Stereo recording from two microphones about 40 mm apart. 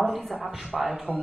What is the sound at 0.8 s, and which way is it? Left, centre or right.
Speech, right.